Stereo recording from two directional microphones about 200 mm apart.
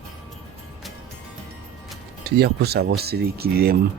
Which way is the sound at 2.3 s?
55° right (ahead or behind).